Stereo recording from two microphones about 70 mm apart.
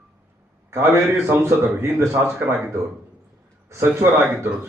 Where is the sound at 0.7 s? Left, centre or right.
Right.